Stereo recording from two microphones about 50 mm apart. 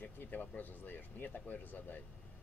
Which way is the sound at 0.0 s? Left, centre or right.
Left.